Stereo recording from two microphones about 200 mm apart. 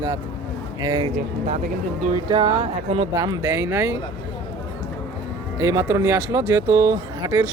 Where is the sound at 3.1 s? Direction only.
20° right (ahead or behind).